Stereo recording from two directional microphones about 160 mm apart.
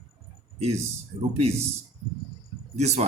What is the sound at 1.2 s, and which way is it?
Speech, 40° right (ahead or behind).